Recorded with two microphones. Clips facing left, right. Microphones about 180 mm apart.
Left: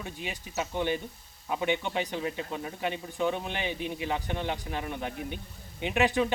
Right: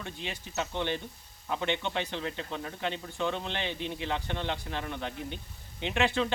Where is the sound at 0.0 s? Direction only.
10° left (ahead or behind).